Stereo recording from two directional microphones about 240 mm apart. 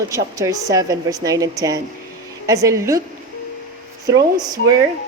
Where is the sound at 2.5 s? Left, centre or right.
Centre.